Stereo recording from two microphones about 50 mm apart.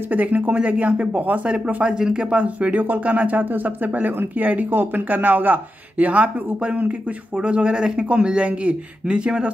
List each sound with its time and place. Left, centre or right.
0.1 s speech: right